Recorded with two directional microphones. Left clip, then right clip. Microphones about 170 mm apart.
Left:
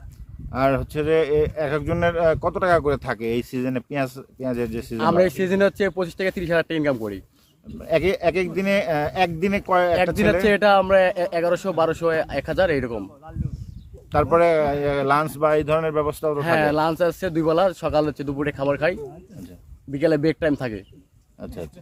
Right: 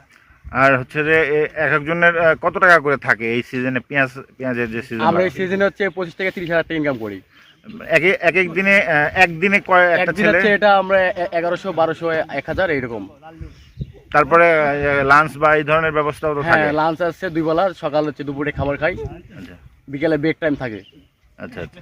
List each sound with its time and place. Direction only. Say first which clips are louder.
0.5 s speech: right 6 dB; 5° right (ahead or behind)
5.4 s speech: right 2 dB; 25° left (ahead or behind)
7.8 s speech: right 5 dB; 5° right (ahead or behind)
10.4 s speech: right 1 dB; 20° left (ahead or behind)
14.1 s speech: right 5 dB; 5° right (ahead or behind)
16.6 s speech: right 3 dB; 25° left (ahead or behind)
20.0 s speech: right 2 dB; 25° left (ahead or behind)
21.3 s speech: right 4 dB; 5° right (ahead or behind)